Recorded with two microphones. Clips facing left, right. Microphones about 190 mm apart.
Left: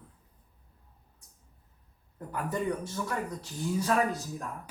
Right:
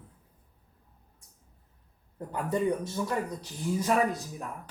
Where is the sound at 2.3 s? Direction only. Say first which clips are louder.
Right 3 dB; 20° right (ahead or behind).